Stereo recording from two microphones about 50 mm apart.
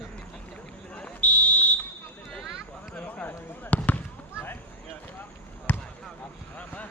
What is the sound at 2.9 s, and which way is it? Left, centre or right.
Basketball bounce, left.